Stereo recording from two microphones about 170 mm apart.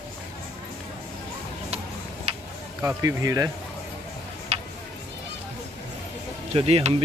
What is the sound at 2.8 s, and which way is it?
Speech, 20° right (ahead or behind).